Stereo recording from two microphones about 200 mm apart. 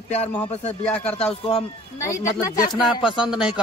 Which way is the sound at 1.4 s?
30° left (ahead or behind).